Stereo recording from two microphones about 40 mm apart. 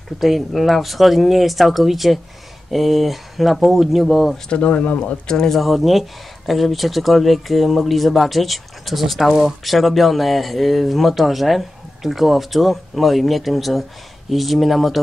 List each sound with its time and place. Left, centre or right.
0.2 s speech: centre
4.5 s speech: left
5.5 s speech: centre